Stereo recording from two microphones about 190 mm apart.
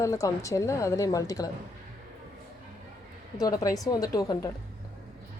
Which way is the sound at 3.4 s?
20° left (ahead or behind).